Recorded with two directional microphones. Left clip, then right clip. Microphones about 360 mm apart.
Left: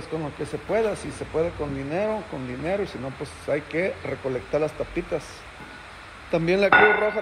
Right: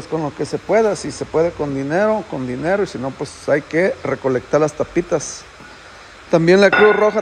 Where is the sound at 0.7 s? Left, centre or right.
Right.